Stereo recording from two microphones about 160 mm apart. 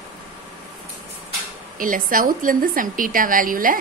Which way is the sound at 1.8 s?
60° right (ahead or behind).